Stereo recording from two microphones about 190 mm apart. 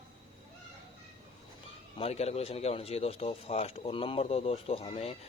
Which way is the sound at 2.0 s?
35° left (ahead or behind).